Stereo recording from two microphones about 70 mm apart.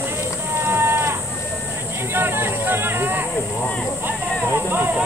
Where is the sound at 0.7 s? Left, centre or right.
Right.